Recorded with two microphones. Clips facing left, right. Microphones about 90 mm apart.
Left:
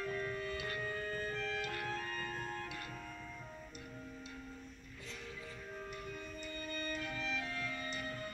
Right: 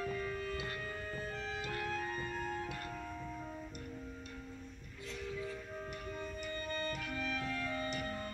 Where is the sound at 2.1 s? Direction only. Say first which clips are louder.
Right 3 dB; 15° right (ahead or behind).